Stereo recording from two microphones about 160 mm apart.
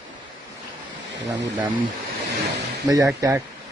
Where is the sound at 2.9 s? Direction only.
20° right (ahead or behind).